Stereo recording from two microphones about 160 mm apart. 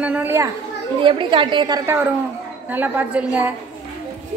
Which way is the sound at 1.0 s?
30° right (ahead or behind).